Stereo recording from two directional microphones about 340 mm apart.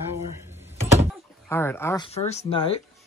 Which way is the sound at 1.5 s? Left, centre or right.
Centre.